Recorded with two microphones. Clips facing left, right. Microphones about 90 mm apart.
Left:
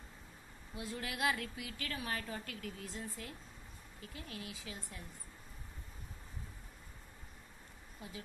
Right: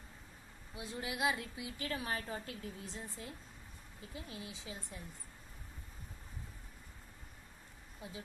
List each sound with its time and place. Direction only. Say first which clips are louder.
0.7 s a woman's voice: even; 20° right (ahead or behind)